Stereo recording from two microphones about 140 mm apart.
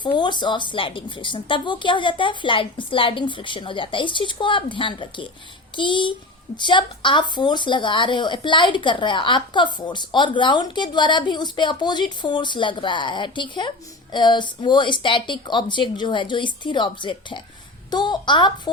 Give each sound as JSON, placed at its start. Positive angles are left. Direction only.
{"t": 0.0, "sound": "speech", "side_deg": 35}